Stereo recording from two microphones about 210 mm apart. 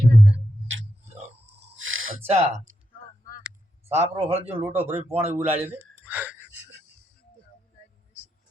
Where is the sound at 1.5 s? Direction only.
70° right (ahead or behind).